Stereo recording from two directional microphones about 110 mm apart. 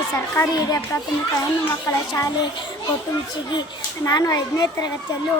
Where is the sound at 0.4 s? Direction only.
25° left (ahead or behind).